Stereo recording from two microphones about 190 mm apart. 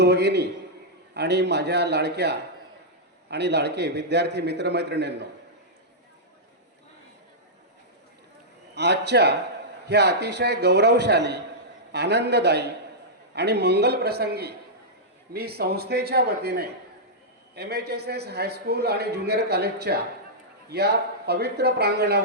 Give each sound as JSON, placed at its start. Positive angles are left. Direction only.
{"t": 0.0, "sound": "a man's voice", "side_deg": -60}
{"t": 8.7, "sound": "a man's voice", "side_deg": -60}